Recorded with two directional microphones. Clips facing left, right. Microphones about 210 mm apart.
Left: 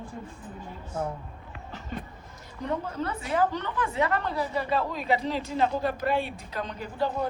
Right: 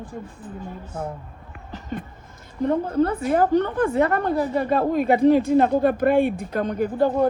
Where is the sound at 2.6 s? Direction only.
55° right (ahead or behind).